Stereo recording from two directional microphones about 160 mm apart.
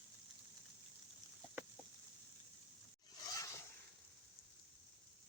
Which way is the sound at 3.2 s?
20° left (ahead or behind).